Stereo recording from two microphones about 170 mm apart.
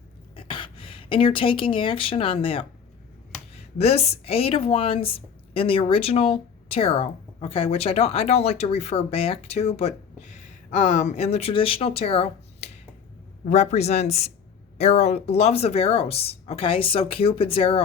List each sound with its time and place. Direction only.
0.3 s a woman's voice: 30° left (ahead or behind)
10.8 s a woman's voice: 45° left (ahead or behind)